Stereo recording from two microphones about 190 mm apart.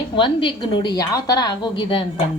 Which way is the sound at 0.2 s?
25° left (ahead or behind).